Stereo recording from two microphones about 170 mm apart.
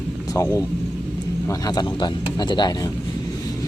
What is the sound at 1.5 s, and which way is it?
Speech, 25° left (ahead or behind).